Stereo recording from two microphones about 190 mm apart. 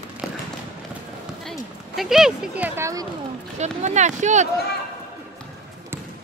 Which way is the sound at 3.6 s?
40° right (ahead or behind).